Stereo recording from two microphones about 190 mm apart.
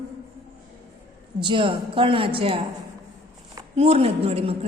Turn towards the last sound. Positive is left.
turn(degrees=-30)  # may be behind; listen again after turning